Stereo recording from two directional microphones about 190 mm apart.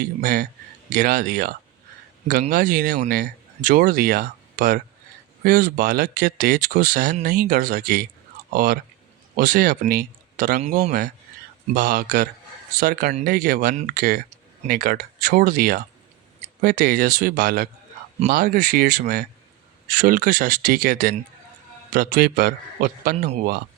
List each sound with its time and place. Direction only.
0.0 s a man's voice: 45° right (ahead or behind)